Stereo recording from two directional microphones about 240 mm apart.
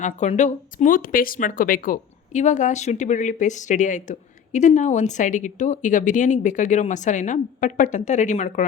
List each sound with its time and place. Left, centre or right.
0.0 s speech: left